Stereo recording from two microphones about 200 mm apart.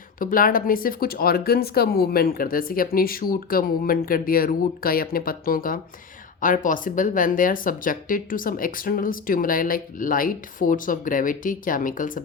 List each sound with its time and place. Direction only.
0.2 s speech: 45° left (ahead or behind)